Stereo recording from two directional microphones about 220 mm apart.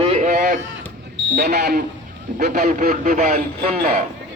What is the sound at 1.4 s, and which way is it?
Speech, 45° right (ahead or behind).